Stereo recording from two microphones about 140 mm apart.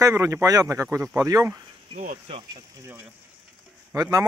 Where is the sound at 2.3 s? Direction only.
45° right (ahead or behind).